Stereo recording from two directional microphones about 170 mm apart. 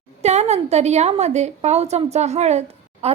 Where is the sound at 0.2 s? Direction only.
40° right (ahead or behind).